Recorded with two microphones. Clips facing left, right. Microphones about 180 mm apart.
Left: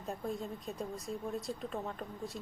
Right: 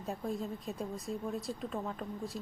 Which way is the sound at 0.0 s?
Centre (ahead or behind).